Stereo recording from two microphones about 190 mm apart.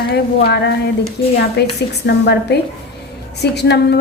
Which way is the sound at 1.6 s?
60° left (ahead or behind).